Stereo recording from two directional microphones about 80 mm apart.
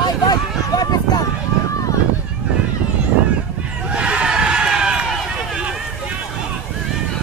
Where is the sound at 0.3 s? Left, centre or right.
Left.